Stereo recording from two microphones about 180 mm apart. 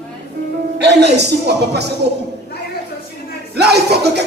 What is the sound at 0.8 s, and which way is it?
Speech, 70° right (ahead or behind).